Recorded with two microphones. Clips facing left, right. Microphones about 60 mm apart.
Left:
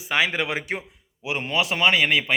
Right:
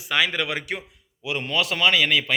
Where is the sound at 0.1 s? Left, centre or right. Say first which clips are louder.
Even; left.